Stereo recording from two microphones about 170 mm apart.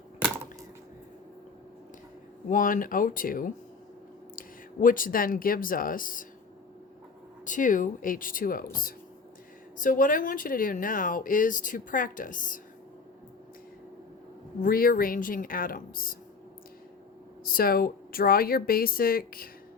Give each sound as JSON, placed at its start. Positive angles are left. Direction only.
{"t": 2.5, "sound": "speech", "side_deg": 50}
{"t": 7.4, "sound": "speech", "side_deg": 50}
{"t": 14.6, "sound": "speech", "side_deg": 60}
{"t": 17.4, "sound": "speech", "side_deg": 60}